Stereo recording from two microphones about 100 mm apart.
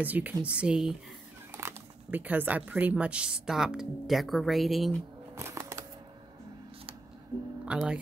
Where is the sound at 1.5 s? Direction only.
20° right (ahead or behind); by 4.9 s centre (ahead or behind).